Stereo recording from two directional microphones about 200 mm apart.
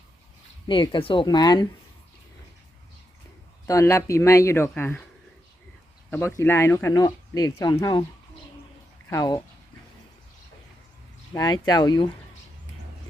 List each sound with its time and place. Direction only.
0.7 s speech: 25° left (ahead or behind)
3.7 s speech: 15° left (ahead or behind)
6.1 s speech: 10° left (ahead or behind)
9.0 s speech: 20° left (ahead or behind)
11.3 s speech: 20° left (ahead or behind)